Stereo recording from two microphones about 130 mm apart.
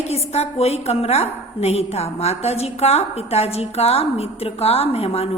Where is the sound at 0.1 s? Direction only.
55° left (ahead or behind).